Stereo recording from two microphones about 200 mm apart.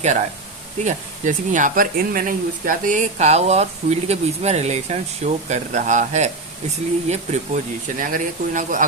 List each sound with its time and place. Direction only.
0.8 s speech: 40° right (ahead or behind)